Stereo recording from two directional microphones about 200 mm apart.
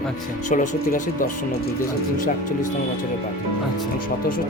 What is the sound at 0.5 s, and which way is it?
Speech, 40° left (ahead or behind).